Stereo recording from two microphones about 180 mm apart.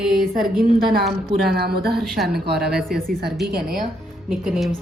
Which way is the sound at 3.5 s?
55° right (ahead or behind).